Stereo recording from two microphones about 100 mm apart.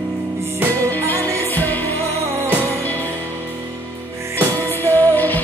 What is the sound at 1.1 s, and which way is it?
Music, 20° left (ahead or behind).